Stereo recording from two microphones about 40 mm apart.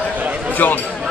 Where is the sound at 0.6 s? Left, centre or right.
Left.